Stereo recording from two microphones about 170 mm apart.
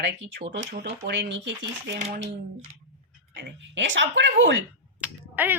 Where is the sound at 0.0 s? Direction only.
90° right.